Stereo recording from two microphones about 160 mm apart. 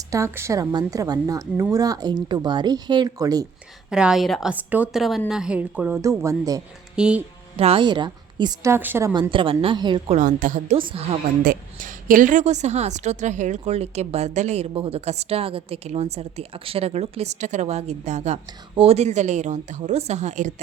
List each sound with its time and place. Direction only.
0.1 s speech: 15° right (ahead or behind)
3.8 s a woman's voice: 5° right (ahead or behind)
6.0 s speech: 20° right (ahead or behind)
6.9 s a woman's voice: 5° right (ahead or behind)
7.6 s speech: 35° right (ahead or behind)
8.7 s a woman's voice: 15° right (ahead or behind)
9.3 s a woman's voice: 35° right (ahead or behind)
10.1 s a woman's voice: 55° right (ahead or behind)
10.8 s a woman's voice: 35° right (ahead or behind)
11.4 s a woman's voice: 60° right (ahead or behind)